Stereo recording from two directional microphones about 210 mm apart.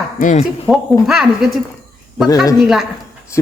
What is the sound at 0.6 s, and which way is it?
Speech, centre (ahead or behind).